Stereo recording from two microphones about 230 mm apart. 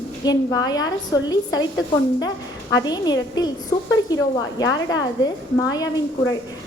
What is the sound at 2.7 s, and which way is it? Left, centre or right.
A woman's voice, centre.